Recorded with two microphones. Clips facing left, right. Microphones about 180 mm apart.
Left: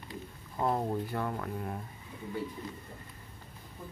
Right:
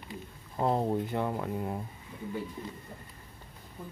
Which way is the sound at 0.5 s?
25° right (ahead or behind).